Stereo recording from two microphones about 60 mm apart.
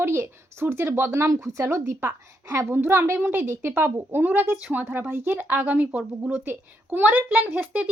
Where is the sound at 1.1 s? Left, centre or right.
Right.